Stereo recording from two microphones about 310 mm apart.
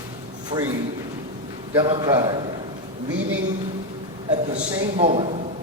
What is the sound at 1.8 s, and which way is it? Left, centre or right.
Speech, centre.